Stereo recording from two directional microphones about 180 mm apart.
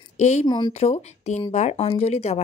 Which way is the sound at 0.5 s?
25° left (ahead or behind).